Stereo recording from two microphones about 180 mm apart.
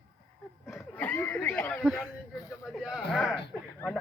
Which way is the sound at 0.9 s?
10° left (ahead or behind).